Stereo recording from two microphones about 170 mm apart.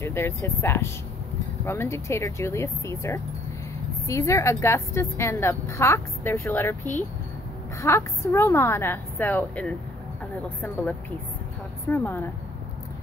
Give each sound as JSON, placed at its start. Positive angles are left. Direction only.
{"t": 0.0, "sound": "a woman's voice", "side_deg": 15}
{"t": 11.9, "sound": "a woman's voice", "side_deg": 10}